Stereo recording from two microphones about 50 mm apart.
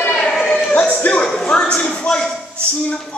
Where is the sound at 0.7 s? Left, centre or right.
Left.